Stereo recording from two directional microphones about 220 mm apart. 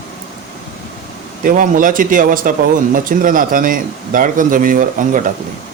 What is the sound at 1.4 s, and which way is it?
Speech, 40° right (ahead or behind).